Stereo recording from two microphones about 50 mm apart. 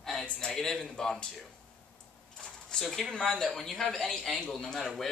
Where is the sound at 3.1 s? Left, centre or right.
Centre.